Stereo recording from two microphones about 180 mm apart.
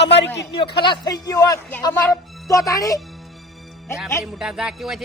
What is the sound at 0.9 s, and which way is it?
Speech, 20° left (ahead or behind).